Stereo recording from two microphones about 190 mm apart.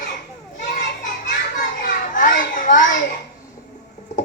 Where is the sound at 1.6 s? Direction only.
45° left (ahead or behind).